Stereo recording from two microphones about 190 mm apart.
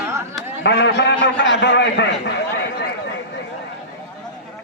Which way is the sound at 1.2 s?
70° left (ahead or behind).